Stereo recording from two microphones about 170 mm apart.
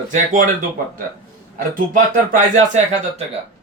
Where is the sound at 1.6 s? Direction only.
50° right (ahead or behind).